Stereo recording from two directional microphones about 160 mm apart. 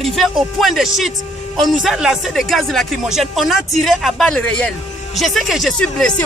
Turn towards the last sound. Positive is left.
turn(degrees=5)  # may be behind; listen again after turning